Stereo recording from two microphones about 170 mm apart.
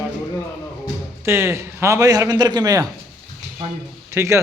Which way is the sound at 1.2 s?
15° right (ahead or behind).